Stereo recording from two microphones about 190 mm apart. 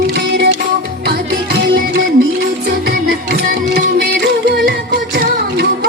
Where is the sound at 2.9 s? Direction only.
55° right (ahead or behind).